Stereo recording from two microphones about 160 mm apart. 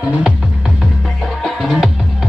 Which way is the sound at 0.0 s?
5° right (ahead or behind).